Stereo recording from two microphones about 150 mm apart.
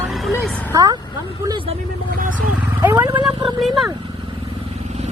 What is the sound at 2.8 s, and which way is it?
Vehicle, 15° right (ahead or behind).